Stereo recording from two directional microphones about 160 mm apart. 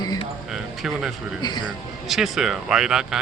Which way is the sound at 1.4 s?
25° left (ahead or behind).